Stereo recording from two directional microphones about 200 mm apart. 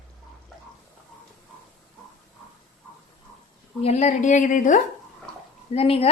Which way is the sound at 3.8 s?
30° left (ahead or behind).